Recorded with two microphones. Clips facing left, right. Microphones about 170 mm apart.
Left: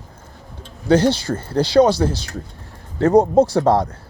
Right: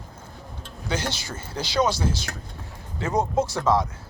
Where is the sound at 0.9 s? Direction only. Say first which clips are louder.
Left 14 dB; 60° left (ahead or behind).